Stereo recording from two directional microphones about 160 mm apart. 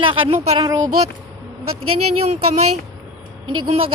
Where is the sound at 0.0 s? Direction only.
30° right (ahead or behind).